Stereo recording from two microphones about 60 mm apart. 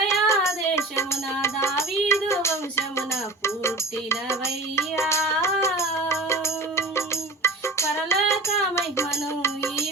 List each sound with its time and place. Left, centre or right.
0.1 s music: left